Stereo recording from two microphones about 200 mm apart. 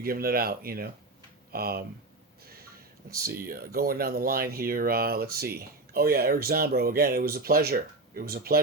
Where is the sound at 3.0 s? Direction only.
55° right (ahead or behind).